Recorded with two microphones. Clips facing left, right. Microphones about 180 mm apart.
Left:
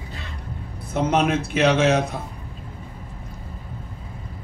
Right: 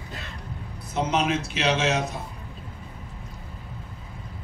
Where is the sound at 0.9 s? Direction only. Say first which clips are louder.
Left 4 dB; 55° left (ahead or behind).